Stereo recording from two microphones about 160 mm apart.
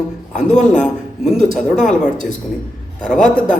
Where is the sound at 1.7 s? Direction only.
50° left (ahead or behind).